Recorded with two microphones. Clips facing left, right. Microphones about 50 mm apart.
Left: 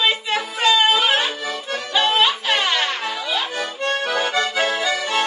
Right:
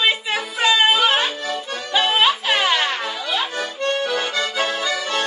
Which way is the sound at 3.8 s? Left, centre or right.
Centre.